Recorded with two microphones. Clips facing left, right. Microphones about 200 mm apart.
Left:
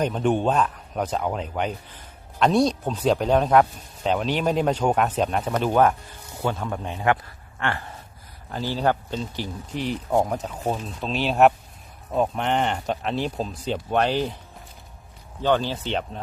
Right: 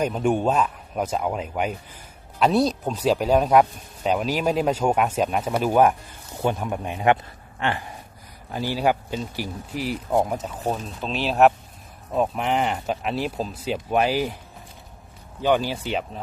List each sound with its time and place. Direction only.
0.0 s speech: 10° right (ahead or behind)
15.4 s speech: 10° right (ahead or behind)